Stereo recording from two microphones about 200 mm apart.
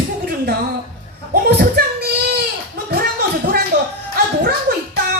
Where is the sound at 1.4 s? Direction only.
50° right (ahead or behind).